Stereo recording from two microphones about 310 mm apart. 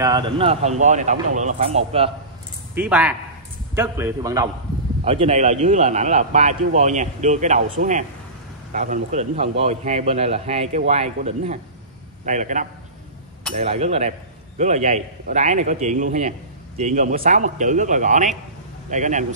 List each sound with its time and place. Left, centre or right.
0.0 s a man's voice: centre
2.7 s a man's voice: centre; by 19.2 s right